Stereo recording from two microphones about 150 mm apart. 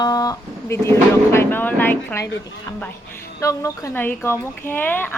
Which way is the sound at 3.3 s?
20° left (ahead or behind).